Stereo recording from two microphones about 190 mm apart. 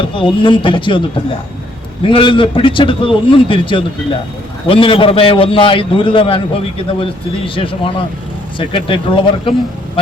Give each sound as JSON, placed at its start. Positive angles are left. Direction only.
{"t": 0.1, "sound": "a man's voice", "side_deg": 25}
{"t": 2.0, "sound": "a man's voice", "side_deg": 25}